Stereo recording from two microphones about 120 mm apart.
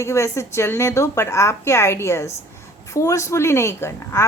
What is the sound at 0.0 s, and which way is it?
A woman's voice, 25° left (ahead or behind).